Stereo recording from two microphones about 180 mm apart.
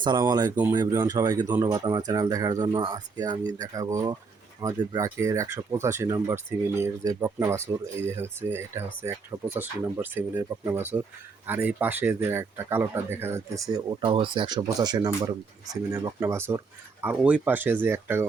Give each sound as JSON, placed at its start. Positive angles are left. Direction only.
{"t": 0.0, "sound": "speech", "side_deg": -25}